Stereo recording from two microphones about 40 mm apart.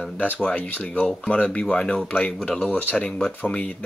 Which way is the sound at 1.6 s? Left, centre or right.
Left.